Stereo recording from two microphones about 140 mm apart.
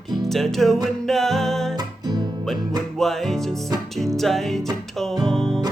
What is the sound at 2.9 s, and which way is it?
Music, centre (ahead or behind).